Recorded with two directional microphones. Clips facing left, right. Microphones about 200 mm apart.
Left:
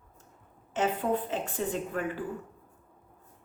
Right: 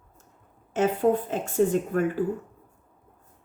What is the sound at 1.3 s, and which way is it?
Speech, 45° right (ahead or behind).